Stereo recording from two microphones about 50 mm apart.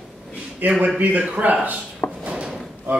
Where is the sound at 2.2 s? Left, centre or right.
Right.